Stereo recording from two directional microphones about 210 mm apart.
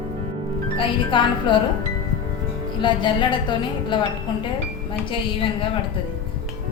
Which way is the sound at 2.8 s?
20° left (ahead or behind).